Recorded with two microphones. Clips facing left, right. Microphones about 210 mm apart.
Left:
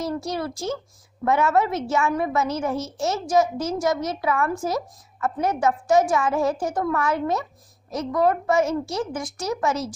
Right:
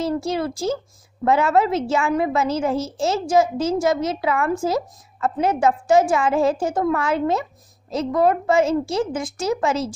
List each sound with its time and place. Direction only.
0.0 s a woman's voice: 25° right (ahead or behind)